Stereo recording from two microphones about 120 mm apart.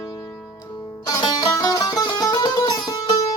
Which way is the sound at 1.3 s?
35° left (ahead or behind).